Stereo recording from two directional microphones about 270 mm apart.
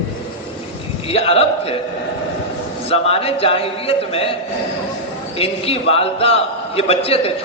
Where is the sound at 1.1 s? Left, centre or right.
Left.